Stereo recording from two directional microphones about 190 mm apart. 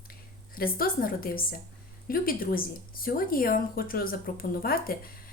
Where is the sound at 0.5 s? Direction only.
50° left (ahead or behind).